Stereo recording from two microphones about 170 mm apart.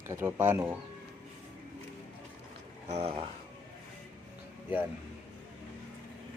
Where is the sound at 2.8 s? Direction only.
40° right (ahead or behind).